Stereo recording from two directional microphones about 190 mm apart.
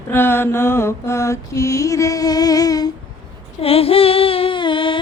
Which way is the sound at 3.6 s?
30° left (ahead or behind).